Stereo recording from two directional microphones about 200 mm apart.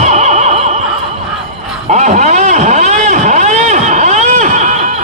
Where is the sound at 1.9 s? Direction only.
35° right (ahead or behind).